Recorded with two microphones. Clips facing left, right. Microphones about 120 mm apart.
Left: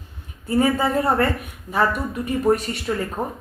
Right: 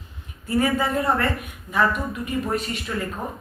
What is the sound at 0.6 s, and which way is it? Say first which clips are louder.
Speech: left 3 dB; 30° left (ahead or behind).